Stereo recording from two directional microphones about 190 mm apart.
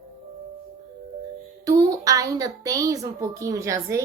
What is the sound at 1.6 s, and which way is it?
Speech, 20° right (ahead or behind).